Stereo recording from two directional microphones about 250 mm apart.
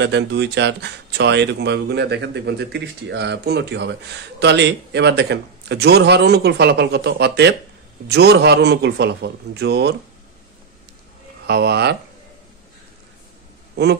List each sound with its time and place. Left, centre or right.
0.0 s speech: right
11.4 s speech: right